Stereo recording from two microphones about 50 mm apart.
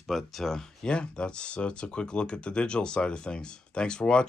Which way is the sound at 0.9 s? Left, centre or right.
Centre.